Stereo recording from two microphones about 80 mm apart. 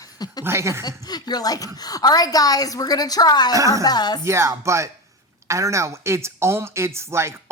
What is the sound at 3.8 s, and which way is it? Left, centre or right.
Speech, left.